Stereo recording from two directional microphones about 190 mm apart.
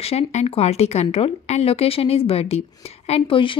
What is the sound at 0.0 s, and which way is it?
Speech, 35° left (ahead or behind).